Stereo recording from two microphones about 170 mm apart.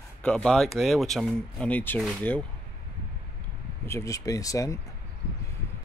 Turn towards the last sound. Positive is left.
turn(degrees=20)  # may be behind; listen again after turning